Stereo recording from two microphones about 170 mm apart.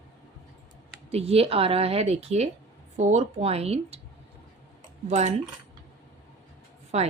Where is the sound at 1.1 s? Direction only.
35° right (ahead or behind).